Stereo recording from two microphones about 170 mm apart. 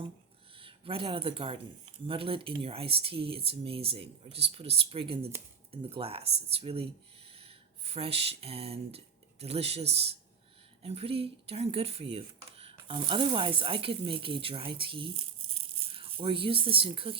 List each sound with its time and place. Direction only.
0.5 s speech: 30° right (ahead or behind)